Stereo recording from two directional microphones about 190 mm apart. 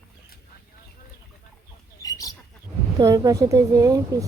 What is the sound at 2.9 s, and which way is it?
A woman's voice, 20° right (ahead or behind).